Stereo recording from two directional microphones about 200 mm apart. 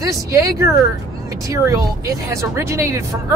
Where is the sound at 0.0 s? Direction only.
15° right (ahead or behind).